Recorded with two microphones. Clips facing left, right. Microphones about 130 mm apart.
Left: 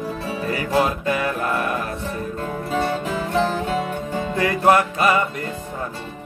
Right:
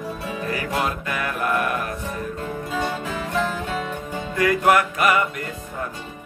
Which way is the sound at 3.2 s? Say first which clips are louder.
Left 3 dB; 35° left (ahead or behind).